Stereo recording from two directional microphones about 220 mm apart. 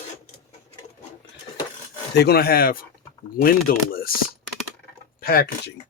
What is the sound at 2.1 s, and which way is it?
Speech, 45° left (ahead or behind).